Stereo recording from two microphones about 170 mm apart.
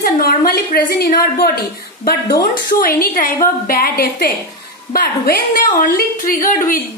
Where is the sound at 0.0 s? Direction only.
60° left (ahead or behind).